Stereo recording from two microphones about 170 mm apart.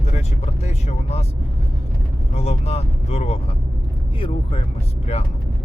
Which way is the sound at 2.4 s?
40° left (ahead or behind).